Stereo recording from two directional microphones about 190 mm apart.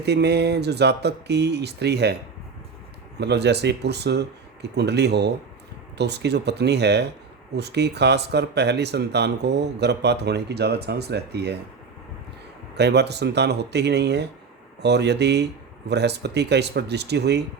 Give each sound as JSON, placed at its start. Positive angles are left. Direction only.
{"t": 0.0, "sound": "speech", "side_deg": -60}
{"t": 3.2, "sound": "speech", "side_deg": -60}
{"t": 12.7, "sound": "speech", "side_deg": -60}